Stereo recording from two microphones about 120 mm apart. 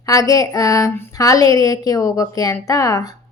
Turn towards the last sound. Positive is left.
turn(degrees=30)  # may be behind; listen again after turning